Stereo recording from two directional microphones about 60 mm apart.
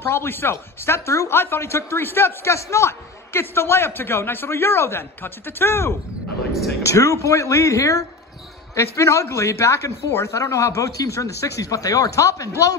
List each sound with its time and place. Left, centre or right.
0.0 s a man's voice: left
6.8 s speech: left